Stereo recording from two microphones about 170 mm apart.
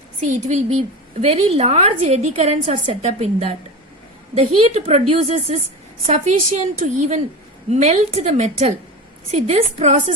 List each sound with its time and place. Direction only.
0.4 s a woman's voice: 40° right (ahead or behind)